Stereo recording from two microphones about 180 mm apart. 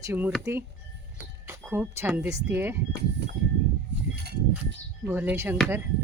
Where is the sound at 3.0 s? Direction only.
70° right (ahead or behind).